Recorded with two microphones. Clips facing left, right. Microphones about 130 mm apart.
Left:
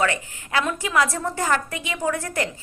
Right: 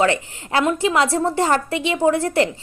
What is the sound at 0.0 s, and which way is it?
A woman's voice, 25° right (ahead or behind).